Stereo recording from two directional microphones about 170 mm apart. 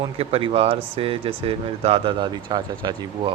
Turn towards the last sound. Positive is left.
turn(degrees=-25)  # may be behind; listen again after turning